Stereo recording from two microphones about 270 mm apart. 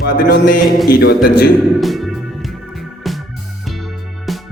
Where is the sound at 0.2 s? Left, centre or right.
Left.